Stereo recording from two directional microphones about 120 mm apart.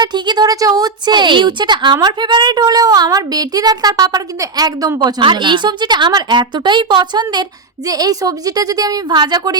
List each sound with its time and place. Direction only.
0.0 s a woman's voice: 35° right (ahead or behind)